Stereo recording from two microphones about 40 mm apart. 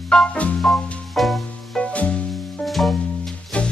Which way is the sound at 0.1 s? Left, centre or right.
Centre.